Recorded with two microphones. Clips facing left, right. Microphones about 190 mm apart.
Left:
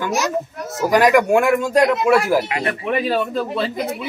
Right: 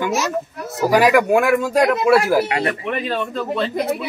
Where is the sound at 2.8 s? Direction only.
5° left (ahead or behind).